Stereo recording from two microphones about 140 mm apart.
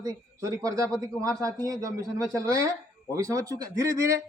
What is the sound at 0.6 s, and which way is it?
Speech, 25° right (ahead or behind).